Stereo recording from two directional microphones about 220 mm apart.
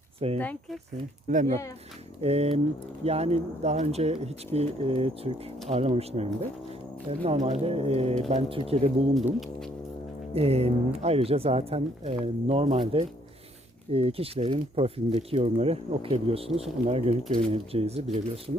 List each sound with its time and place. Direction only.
0.3 s speech: 5° left (ahead or behind)
1.3 s speech: 35° right (ahead or behind)
7.3 s speech: 30° right (ahead or behind)
10.3 s speech: 30° right (ahead or behind)